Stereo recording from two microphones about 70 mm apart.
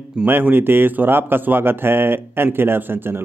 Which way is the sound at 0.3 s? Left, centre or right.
Right.